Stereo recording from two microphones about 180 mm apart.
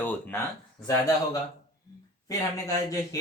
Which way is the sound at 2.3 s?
20° left (ahead or behind).